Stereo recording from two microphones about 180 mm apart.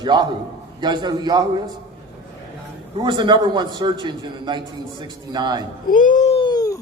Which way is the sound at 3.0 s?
25° right (ahead or behind).